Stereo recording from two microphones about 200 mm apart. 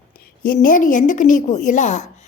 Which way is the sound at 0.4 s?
40° left (ahead or behind).